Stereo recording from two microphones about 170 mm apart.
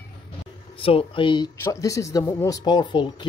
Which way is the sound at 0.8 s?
35° left (ahead or behind).